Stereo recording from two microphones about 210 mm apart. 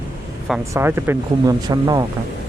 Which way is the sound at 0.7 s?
10° right (ahead or behind).